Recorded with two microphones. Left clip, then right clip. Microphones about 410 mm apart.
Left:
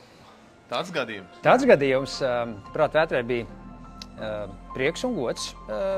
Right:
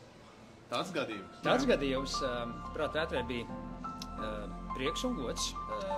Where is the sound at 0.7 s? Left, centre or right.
Left.